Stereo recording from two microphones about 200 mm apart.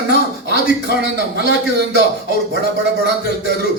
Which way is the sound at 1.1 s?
60° right (ahead or behind).